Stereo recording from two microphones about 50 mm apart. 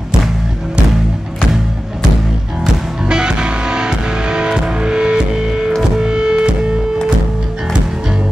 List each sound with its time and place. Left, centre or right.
2.6 s music: centre